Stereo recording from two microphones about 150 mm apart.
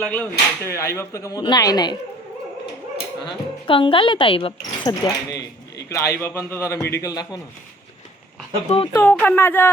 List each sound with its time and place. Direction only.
0.0 s speech: 10° left (ahead or behind); by 2.0 s 25° left (ahead or behind)
3.2 s speech: 35° left (ahead or behind)
8.9 s speech: 15° left (ahead or behind)